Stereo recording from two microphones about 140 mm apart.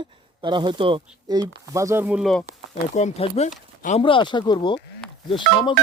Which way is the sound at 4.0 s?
35° left (ahead or behind).